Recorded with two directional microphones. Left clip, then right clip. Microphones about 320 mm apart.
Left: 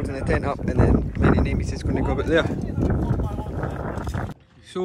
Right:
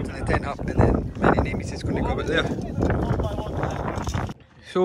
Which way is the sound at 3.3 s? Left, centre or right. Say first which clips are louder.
Right 2 dB; left.